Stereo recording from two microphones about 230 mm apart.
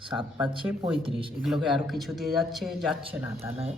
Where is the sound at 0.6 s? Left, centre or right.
Centre.